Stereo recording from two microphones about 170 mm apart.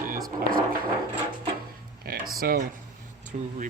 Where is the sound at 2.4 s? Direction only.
60° right (ahead or behind).